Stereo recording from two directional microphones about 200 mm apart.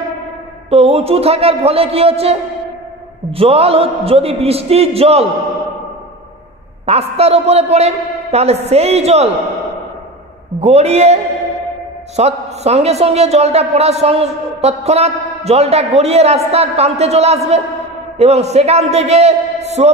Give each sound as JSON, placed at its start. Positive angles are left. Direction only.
{"t": 0.7, "sound": "a man's voice", "side_deg": -30}
{"t": 6.9, "sound": "a man's voice", "side_deg": -30}
{"t": 10.6, "sound": "a man's voice", "side_deg": -30}
{"t": 12.2, "sound": "a man's voice", "side_deg": -30}